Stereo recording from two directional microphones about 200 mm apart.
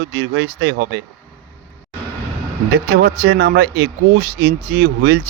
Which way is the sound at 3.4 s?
50° right (ahead or behind).